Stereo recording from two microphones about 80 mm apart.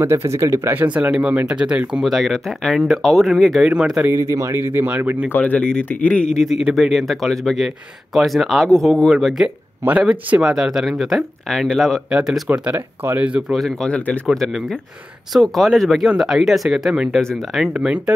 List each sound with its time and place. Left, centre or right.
0.0 s speech: right
1.1 s speech: centre
2.1 s a man's voice: centre
4.1 s speech: right
5.3 s speech: centre
6.4 s a man's voice: centre
9.8 s a man's voice: centre
12.1 s speech: centre
12.7 s speech: right
13.5 s speech: centre
14.2 s a man's voice: centre
17.2 s speech: centre
17.7 s speech: centre